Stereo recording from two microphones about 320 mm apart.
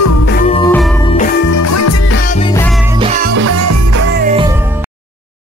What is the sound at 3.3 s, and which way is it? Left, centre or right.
Music, right.